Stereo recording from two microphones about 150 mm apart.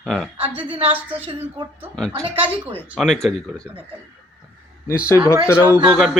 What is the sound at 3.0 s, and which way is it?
Speech, centre (ahead or behind).